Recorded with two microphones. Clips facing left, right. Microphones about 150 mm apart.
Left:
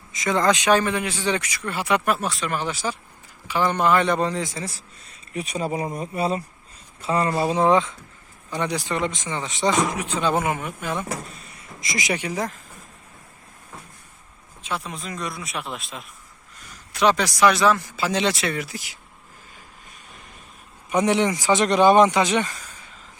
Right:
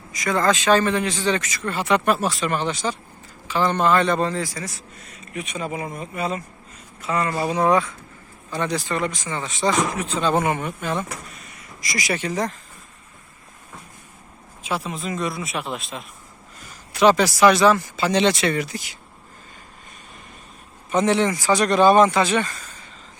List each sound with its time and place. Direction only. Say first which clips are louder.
0.1 s speech: even; 20° left (ahead or behind)
2.1 s a man's voice: right 3 dB; centre (ahead or behind)
11.3 s speech: even; 30° left (ahead or behind); by 12.5 s 10° left (ahead or behind)
14.6 s speech: right 4 dB; 5° right (ahead or behind)
20.9 s speech: right 1 dB; 15° left (ahead or behind)